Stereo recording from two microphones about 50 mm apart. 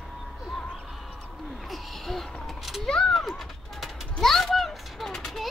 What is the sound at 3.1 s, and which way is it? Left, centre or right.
Bird, centre.